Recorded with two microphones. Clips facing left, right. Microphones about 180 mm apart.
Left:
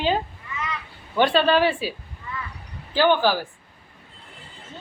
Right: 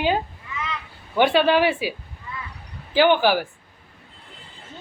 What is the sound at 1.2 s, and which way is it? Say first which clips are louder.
Speech: right 1 dB; 10° right (ahead or behind).